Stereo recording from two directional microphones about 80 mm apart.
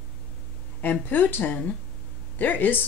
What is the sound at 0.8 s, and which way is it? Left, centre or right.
Speech, left.